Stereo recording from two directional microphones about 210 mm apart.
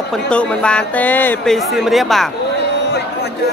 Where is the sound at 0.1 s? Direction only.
5° left (ahead or behind).